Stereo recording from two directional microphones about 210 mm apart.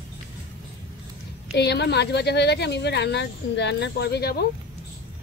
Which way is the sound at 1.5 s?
55° left (ahead or behind).